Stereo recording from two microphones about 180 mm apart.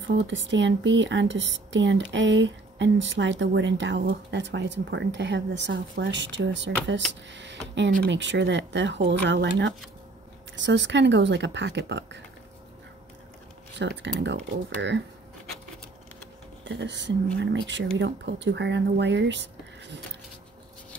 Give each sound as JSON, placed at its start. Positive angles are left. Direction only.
{"t": 0.0, "sound": "speech", "side_deg": -85}
{"t": 13.7, "sound": "speech", "side_deg": -75}
{"t": 16.6, "sound": "speech", "side_deg": -80}